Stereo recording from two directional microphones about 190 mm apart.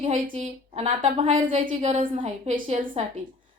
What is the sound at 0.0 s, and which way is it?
A woman's voice, 35° right (ahead or behind).